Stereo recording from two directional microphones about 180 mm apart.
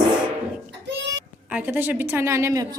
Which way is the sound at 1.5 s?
10° right (ahead or behind).